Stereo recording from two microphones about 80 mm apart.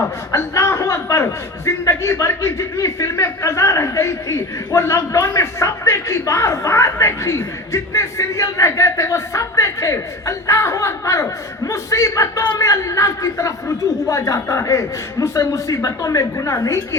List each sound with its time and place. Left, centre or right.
0.3 s speech: left
5.1 s speech: left